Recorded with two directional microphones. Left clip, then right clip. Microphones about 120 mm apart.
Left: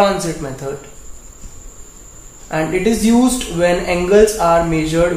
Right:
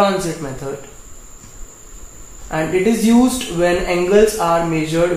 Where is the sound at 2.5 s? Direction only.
Centre (ahead or behind).